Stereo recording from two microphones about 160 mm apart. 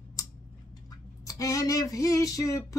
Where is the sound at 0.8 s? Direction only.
20° left (ahead or behind).